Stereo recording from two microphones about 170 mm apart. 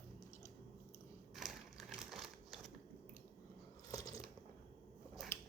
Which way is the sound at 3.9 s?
20° left (ahead or behind).